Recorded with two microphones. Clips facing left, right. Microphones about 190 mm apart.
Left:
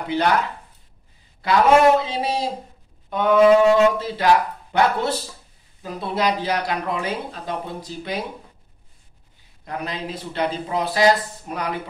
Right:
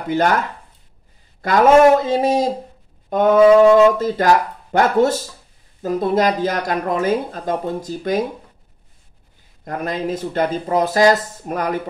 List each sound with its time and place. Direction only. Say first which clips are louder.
0.1 s speech: right 3 dB; 45° right (ahead or behind)
1.4 s speech: right 4 dB; 45° right (ahead or behind)
3.1 s brass instrument: right 5 dB; 45° right (ahead or behind)
4.0 s speech: right 3 dB; 45° right (ahead or behind)
9.7 s speech: right 6 dB; 45° right (ahead or behind)